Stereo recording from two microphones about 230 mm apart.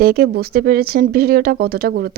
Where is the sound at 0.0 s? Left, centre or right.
Right.